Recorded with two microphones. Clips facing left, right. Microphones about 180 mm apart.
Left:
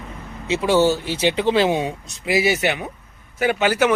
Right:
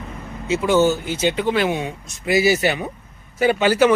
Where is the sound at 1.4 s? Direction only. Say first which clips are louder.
Left 2 dB; 25° left (ahead or behind).